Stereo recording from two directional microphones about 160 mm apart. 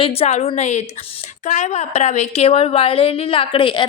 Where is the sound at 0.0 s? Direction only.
40° left (ahead or behind).